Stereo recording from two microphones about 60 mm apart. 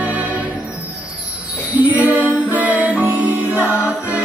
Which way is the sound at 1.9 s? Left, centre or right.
Right.